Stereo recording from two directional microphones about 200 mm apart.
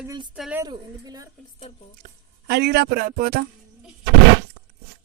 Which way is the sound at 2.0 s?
50° right (ahead or behind).